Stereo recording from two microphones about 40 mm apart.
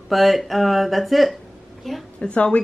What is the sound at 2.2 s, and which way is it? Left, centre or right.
Speech, left.